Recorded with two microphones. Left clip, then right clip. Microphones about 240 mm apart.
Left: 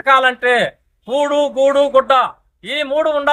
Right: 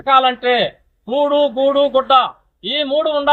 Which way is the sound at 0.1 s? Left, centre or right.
Centre.